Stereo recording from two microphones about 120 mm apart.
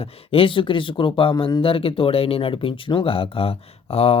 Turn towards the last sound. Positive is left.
turn(degrees=55)  # may be behind; listen again after turning